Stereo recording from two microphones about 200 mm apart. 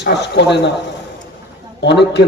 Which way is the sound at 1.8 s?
60° left (ahead or behind).